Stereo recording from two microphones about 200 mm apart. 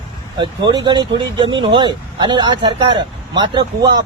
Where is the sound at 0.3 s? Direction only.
25° right (ahead or behind).